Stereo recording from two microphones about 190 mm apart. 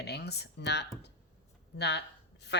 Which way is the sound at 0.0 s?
60° left (ahead or behind).